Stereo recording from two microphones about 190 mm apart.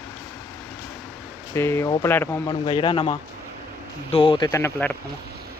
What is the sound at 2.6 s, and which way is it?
Speech, 25° left (ahead or behind).